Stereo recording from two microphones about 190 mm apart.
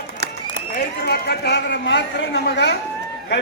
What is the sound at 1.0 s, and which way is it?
A man's voice, 60° left (ahead or behind).